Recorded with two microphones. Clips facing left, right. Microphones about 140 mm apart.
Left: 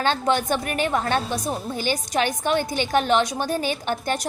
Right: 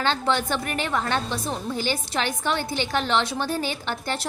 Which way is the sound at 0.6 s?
20° left (ahead or behind).